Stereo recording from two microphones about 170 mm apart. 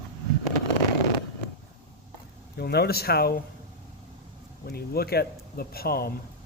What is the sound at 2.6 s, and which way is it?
Speech, 70° left (ahead or behind).